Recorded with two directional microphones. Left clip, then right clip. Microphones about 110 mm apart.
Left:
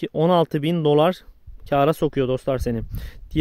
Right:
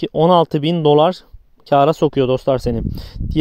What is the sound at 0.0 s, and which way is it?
Speech, 30° right (ahead or behind).